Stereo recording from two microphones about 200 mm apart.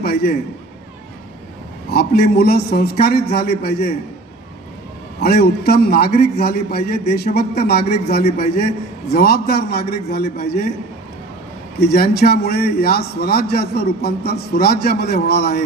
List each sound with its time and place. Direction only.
0.0 s a sound: 55° left (ahead or behind)
1.9 s a man's voice: 50° left (ahead or behind)
5.2 s a man's voice: 50° left (ahead or behind)
11.8 s a man's voice: 55° left (ahead or behind)